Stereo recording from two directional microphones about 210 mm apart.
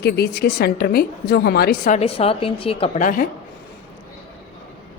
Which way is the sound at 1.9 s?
30° left (ahead or behind).